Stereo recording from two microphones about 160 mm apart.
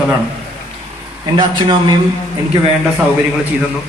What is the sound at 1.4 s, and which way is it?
Speech, 30° right (ahead or behind).